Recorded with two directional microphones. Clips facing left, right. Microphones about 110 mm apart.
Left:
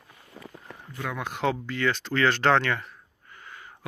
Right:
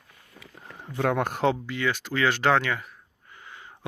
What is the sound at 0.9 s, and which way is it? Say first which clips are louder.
Speech: right 8 dB; 60° right (ahead or behind).